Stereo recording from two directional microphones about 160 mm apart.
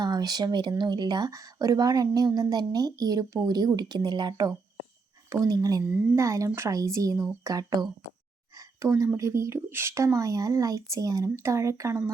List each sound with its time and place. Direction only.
0.0 s speech: 25° right (ahead or behind)
5.8 s speech: 10° right (ahead or behind)